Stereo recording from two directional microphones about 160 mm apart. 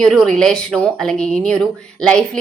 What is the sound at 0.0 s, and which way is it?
Speech, 5° left (ahead or behind).